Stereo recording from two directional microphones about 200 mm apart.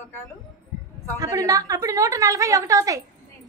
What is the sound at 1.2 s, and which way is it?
A woman's voice, 15° right (ahead or behind).